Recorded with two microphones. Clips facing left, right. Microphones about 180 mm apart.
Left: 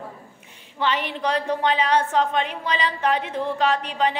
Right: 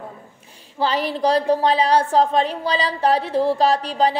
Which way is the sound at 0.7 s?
35° right (ahead or behind).